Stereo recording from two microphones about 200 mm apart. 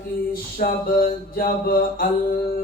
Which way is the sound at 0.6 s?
45° left (ahead or behind).